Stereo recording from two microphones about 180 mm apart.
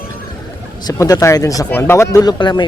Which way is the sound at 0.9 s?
20° left (ahead or behind).